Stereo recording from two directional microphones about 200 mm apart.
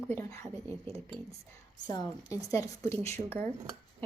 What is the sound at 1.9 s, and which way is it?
A woman's voice, 20° left (ahead or behind).